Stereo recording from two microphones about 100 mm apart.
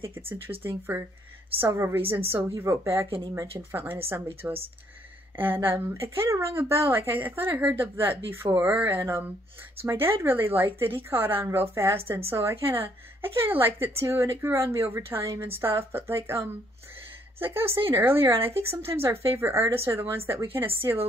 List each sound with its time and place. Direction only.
0.0 s speech: 20° right (ahead or behind)
3.1 s speech: 50° right (ahead or behind)
3.3 s a woman's voice: 25° right (ahead or behind)